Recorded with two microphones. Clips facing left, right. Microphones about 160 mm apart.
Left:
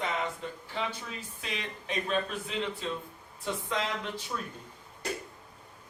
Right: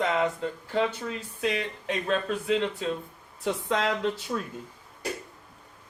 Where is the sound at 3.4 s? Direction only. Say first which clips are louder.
Right 6 dB; 75° right (ahead or behind).